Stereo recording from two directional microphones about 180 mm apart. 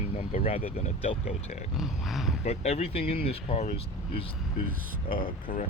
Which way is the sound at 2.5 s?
35° left (ahead or behind).